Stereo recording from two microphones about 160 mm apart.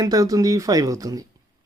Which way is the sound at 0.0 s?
20° right (ahead or behind).